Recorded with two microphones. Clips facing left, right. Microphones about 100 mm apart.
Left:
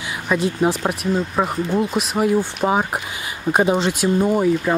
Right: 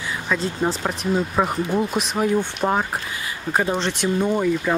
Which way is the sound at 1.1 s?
Centre (ahead or behind).